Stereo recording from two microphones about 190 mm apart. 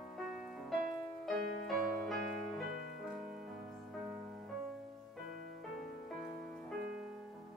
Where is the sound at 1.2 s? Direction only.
Centre (ahead or behind).